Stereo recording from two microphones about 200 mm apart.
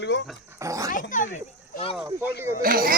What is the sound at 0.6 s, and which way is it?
Dog, 15° right (ahead or behind).